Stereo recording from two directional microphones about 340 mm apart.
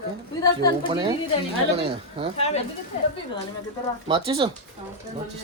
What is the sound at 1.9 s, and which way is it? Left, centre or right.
Speech, centre.